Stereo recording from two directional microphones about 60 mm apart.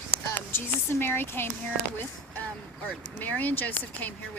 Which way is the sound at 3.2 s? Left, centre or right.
Left.